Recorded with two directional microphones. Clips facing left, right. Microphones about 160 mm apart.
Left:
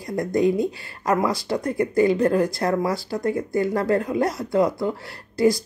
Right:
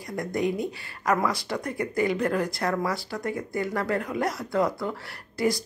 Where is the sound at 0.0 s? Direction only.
25° left (ahead or behind).